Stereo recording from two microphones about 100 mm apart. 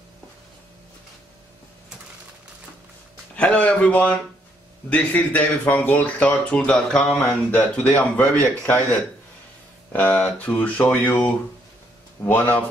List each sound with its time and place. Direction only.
3.3 s speech: 15° left (ahead or behind)
9.9 s speech: 15° left (ahead or behind)